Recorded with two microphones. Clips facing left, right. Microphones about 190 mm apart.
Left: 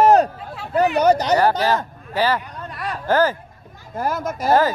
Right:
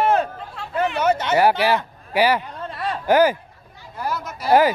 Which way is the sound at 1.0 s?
35° left (ahead or behind).